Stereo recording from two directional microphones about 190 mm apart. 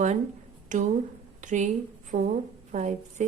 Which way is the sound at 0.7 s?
40° right (ahead or behind).